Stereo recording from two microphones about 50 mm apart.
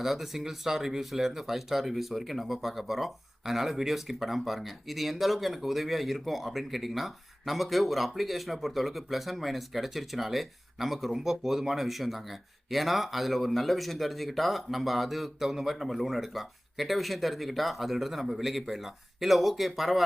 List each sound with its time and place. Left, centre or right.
0.0 s speech: centre